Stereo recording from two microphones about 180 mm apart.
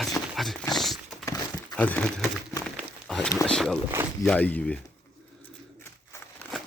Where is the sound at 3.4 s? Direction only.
Centre (ahead or behind).